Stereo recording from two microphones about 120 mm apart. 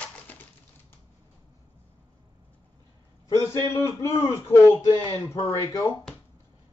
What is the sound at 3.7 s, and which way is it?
Speech, 20° left (ahead or behind).